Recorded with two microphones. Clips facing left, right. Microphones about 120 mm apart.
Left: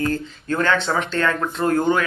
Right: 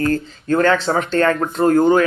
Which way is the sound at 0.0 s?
45° right (ahead or behind).